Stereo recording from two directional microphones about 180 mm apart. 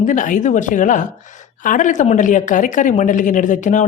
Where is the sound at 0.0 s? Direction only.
45° left (ahead or behind).